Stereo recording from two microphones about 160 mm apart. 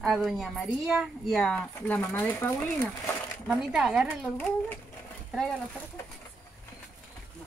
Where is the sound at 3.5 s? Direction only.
5° right (ahead or behind).